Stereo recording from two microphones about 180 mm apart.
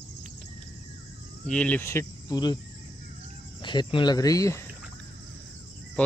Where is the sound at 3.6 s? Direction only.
25° left (ahead or behind).